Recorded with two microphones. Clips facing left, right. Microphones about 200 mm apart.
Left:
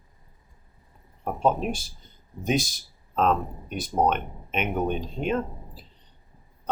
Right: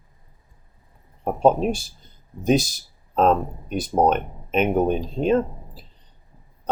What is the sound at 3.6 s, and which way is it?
Speech, 40° right (ahead or behind).